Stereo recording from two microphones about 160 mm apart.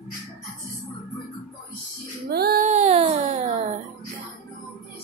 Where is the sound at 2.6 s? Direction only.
45° right (ahead or behind).